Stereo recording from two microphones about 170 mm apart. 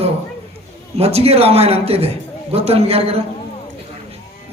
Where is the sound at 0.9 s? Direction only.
35° right (ahead or behind).